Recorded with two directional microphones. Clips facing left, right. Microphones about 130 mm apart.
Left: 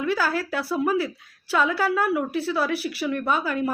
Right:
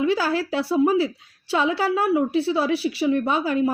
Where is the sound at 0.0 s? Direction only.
25° right (ahead or behind).